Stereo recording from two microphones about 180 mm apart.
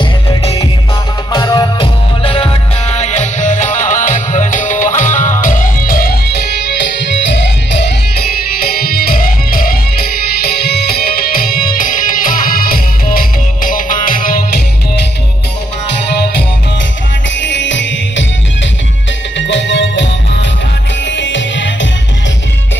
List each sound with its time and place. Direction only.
0.0 s music: 30° left (ahead or behind); by 7.9 s 70° left (ahead or behind)
8.5 s music: 60° left (ahead or behind)
17.4 s music: 90° left
19.3 s music: 90° left
21.1 s music: 90° left